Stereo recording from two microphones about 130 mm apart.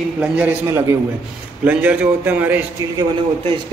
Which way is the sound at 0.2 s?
10° right (ahead or behind).